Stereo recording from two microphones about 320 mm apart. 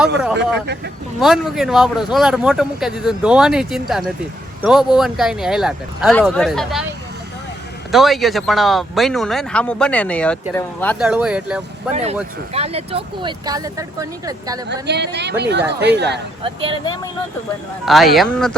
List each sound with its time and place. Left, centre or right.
1.2 s speech: centre
7.9 s speech: centre
11.9 s speech: right
14.7 s speech: right
16.4 s speech: centre
17.8 s speech: centre